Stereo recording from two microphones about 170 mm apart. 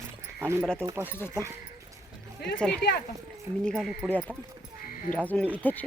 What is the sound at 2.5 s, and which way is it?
Speech, 5° left (ahead or behind).